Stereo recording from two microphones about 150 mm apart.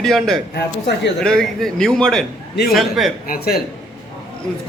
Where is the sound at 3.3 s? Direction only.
90° left.